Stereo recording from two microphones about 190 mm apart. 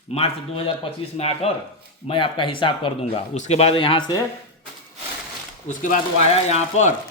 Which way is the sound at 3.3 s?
35° left (ahead or behind).